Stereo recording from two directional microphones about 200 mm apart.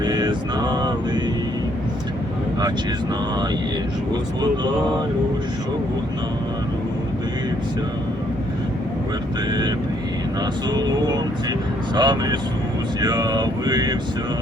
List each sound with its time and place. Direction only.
0.0 s a sound: 20° right (ahead or behind)
9.5 s speech: 20° right (ahead or behind)
10.8 s speech: 20° right (ahead or behind)